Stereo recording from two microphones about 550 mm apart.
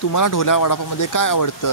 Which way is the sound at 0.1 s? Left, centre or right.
Left.